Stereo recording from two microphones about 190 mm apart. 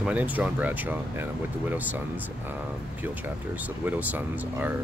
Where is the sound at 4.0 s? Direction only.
10° right (ahead or behind).